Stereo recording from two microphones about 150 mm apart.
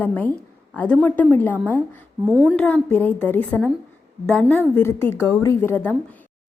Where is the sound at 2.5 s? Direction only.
10° left (ahead or behind).